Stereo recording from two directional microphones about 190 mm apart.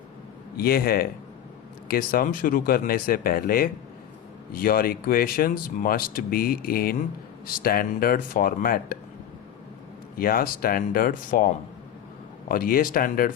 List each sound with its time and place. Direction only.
0.5 s speech: 50° left (ahead or behind)
10.2 s speech: 50° left (ahead or behind)
12.5 s speech: 50° left (ahead or behind)